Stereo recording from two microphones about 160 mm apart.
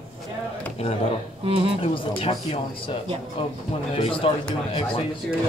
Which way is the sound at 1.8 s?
35° left (ahead or behind).